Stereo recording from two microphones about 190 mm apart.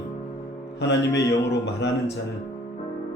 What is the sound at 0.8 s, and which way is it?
Speech, 65° left (ahead or behind).